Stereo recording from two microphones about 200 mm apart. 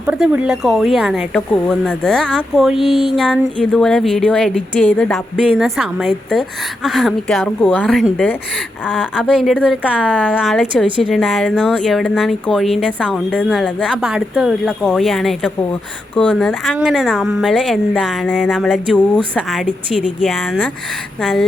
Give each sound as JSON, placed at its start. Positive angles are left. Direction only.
{"t": 0.0, "sound": "speech", "side_deg": -5}
{"t": 10.8, "sound": "a woman's voice", "side_deg": -25}
{"t": 11.1, "sound": "speech", "side_deg": 0}